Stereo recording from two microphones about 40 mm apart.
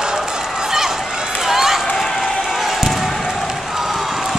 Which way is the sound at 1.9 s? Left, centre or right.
Centre.